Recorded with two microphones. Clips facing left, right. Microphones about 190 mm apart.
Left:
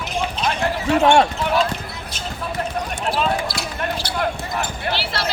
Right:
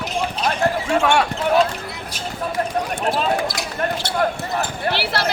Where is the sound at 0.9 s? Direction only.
30° left (ahead or behind).